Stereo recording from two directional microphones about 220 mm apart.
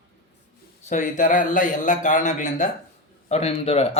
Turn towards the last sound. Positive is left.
turn(degrees=30)  # may be behind; listen again after turning